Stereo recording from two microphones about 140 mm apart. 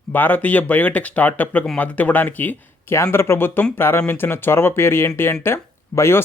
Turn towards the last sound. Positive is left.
turn(degrees=20)  # may be behind; listen again after turning